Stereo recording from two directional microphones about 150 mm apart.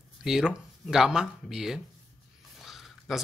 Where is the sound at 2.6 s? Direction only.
Centre (ahead or behind).